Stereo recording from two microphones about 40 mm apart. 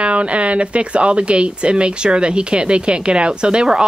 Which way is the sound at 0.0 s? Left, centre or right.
Right.